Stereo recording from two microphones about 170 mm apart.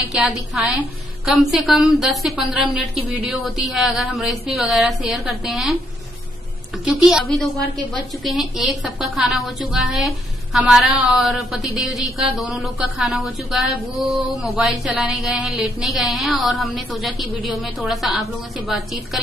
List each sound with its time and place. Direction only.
0.1 s a woman's voice: 5° right (ahead or behind)
6.8 s a woman's voice: 5° right (ahead or behind)